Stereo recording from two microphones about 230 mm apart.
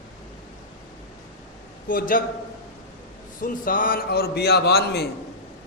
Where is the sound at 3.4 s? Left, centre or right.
Left.